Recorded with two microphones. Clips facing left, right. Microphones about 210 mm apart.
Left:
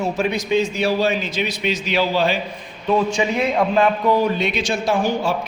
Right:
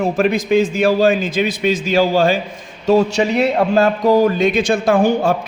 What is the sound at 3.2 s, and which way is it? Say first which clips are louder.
Speech: right 5 dB; 70° right (ahead or behind).